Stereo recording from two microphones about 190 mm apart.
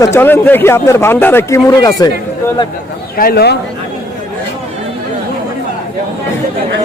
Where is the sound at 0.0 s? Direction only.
10° left (ahead or behind).